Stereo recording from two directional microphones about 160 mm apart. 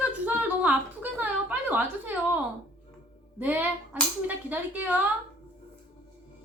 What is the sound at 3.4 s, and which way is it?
A woman's voice, 10° right (ahead or behind).